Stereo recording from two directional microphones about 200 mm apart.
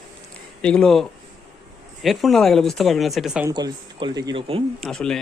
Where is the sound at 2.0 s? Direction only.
Centre (ahead or behind).